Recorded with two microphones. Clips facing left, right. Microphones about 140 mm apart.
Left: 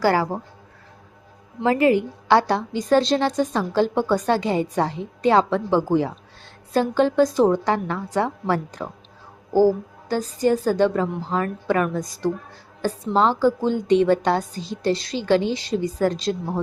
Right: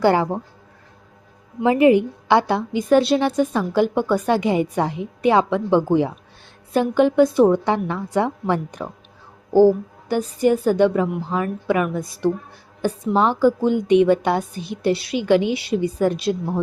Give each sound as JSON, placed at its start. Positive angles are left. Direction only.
{"t": 0.0, "sound": "speech", "side_deg": -20}
{"t": 1.6, "sound": "a woman's voice", "side_deg": -20}